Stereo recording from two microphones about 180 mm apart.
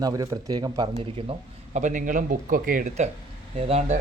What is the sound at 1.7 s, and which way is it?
Speech, 45° right (ahead or behind).